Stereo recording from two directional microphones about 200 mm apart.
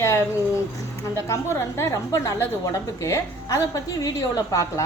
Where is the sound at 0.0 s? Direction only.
15° left (ahead or behind).